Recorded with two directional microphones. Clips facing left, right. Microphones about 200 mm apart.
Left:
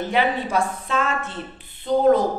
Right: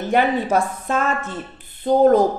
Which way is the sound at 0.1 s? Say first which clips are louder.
Right 5 dB; 45° right (ahead or behind).